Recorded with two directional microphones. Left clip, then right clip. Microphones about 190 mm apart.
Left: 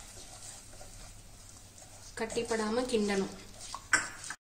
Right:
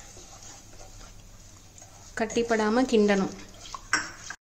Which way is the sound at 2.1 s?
40° right (ahead or behind).